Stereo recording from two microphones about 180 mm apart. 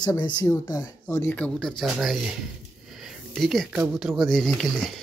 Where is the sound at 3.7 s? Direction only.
Centre (ahead or behind).